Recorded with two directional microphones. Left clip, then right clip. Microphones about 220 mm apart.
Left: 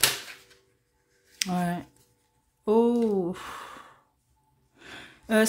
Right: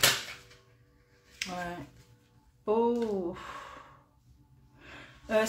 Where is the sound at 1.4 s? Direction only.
45° left (ahead or behind).